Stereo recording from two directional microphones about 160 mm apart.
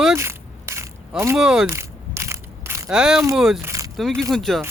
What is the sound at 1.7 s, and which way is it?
Crushing, 15° right (ahead or behind).